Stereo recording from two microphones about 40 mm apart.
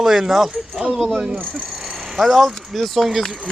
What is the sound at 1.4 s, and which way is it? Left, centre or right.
Speech, right.